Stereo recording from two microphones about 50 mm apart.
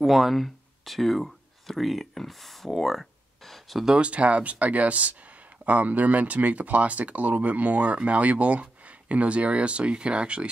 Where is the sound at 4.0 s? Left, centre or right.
Right.